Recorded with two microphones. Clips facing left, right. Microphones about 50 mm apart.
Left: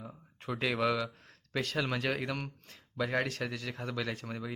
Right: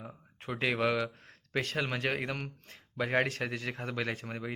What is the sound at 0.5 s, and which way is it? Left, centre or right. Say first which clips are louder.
Speech: right 1 dB; right.